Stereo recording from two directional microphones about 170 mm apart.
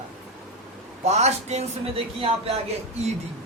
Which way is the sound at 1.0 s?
40° right (ahead or behind).